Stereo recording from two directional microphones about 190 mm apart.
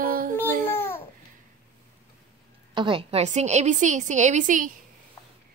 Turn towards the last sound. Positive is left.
turn(degrees=-40)  # may be behind; listen again after turning